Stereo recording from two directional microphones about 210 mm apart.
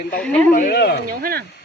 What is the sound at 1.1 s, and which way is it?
Speech, 45° right (ahead or behind).